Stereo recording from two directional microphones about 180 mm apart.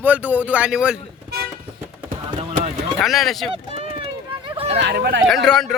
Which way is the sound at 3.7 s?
35° right (ahead or behind).